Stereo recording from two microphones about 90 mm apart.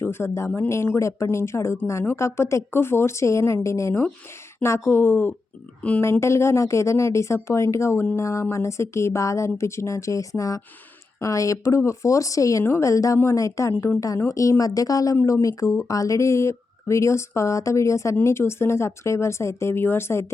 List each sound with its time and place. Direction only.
0.0 s speech: 30° left (ahead or behind)